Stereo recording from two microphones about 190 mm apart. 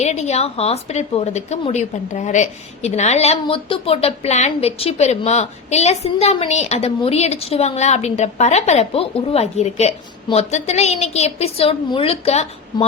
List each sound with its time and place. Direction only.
0.0 s a woman's voice: 35° left (ahead or behind)